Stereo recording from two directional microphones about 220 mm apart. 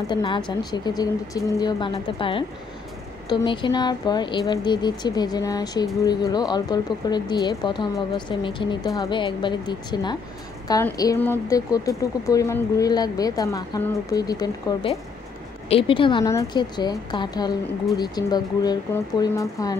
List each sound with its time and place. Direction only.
0.1 s speech: 20° left (ahead or behind)